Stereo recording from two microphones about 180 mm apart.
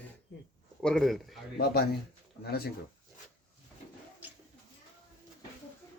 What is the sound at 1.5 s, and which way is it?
Speech, 60° left (ahead or behind).